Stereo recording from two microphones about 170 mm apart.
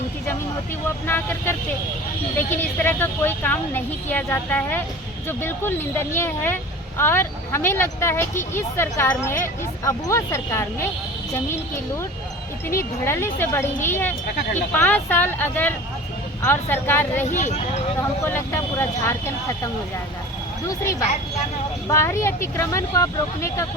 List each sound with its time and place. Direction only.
1.0 s speech: 15° left (ahead or behind)
12.7 s speech: 15° left (ahead or behind)
17.3 s speech: 45° left (ahead or behind)
18.2 s speech: 15° left (ahead or behind)
21.8 s speech: 15° left (ahead or behind)